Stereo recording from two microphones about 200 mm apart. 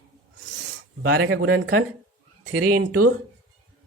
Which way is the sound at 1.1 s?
75° right (ahead or behind).